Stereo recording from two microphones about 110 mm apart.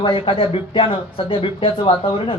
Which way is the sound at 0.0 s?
55° left (ahead or behind).